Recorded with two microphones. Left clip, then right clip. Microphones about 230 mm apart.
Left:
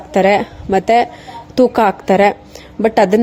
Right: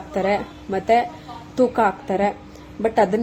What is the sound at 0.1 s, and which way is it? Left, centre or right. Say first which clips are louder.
A woman's voice: left 10 dB; left.